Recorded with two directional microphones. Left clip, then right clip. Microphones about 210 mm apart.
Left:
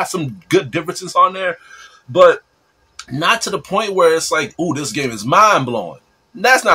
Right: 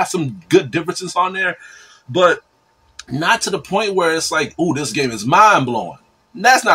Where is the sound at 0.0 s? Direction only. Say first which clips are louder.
Right 2 dB; 10° left (ahead or behind).